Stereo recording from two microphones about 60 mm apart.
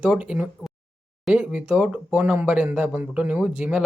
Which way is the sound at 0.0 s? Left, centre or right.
Right.